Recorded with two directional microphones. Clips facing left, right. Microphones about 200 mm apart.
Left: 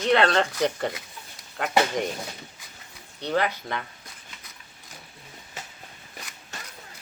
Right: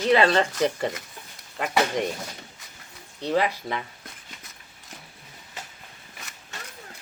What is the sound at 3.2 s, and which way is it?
Speech, centre (ahead or behind).